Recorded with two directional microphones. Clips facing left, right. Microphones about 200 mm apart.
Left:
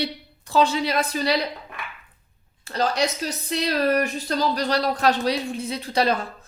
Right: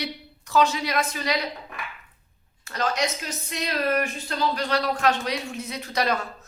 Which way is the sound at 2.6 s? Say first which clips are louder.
Left 3 dB; 30° left (ahead or behind).